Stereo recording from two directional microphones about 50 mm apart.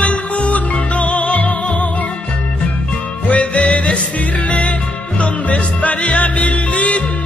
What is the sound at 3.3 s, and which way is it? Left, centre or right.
Music, left.